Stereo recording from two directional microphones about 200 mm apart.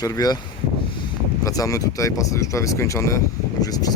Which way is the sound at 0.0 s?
20° left (ahead or behind).